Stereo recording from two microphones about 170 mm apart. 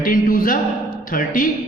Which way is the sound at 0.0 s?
55° left (ahead or behind).